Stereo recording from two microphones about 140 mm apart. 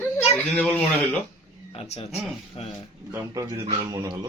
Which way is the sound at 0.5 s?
5° left (ahead or behind).